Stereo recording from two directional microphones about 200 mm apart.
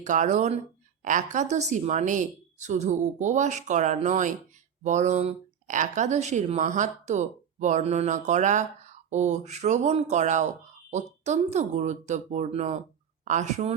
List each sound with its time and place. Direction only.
0.0 s speech: 40° right (ahead or behind)